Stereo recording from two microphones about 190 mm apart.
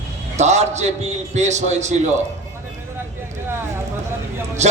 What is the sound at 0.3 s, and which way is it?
Speech, 35° right (ahead or behind).